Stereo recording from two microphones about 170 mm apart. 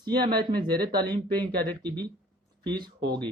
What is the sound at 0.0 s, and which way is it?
Speech, 25° right (ahead or behind).